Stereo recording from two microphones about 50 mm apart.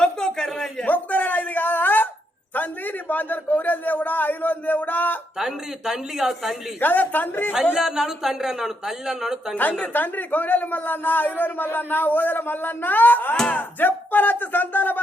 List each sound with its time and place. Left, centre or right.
0.0 s a sound: centre
0.9 s a sound: left
2.6 s speech: left
5.4 s speech: centre
6.7 s speech: left
7.8 s speech: centre
9.8 s speech: left